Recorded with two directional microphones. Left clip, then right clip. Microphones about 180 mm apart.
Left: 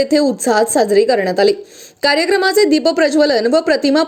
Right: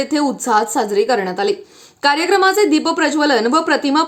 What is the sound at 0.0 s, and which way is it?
A woman's voice, 10° left (ahead or behind).